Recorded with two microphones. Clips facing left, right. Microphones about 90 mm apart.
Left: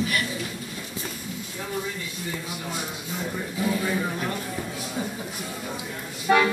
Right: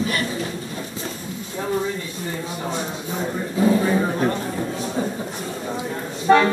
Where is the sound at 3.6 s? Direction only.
35° right (ahead or behind).